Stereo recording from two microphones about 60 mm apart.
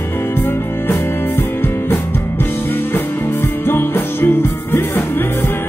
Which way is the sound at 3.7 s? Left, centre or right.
Left.